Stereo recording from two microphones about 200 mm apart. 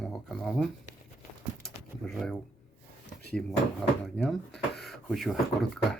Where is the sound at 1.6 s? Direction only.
Centre (ahead or behind).